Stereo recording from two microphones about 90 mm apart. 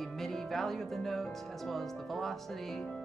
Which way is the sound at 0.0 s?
Centre (ahead or behind).